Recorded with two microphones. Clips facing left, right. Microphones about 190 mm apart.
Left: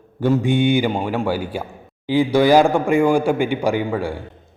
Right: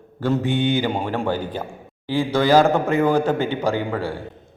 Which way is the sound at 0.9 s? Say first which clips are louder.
Left 2 dB; centre (ahead or behind).